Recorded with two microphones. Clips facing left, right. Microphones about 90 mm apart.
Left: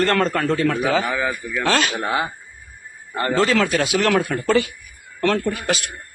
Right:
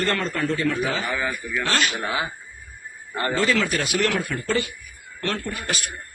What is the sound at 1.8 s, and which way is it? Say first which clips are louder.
Speech: left 3 dB; 45° left (ahead or behind).